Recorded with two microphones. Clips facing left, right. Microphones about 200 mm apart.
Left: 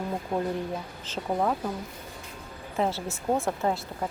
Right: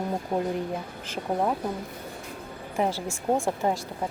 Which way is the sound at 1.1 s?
10° right (ahead or behind).